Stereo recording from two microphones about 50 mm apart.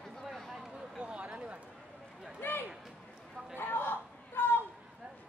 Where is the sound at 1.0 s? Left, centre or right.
Right.